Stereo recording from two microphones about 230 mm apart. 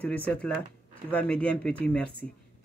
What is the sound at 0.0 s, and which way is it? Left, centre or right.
Speech, centre.